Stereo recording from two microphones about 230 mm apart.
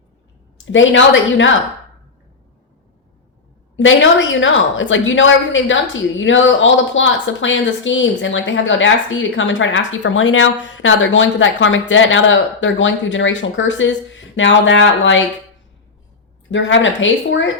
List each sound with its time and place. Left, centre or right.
0.6 s a woman's voice: left
3.8 s a woman's voice: left
16.5 s a woman's voice: left